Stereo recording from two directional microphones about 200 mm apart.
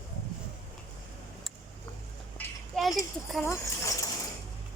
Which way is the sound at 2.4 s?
Centre (ahead or behind).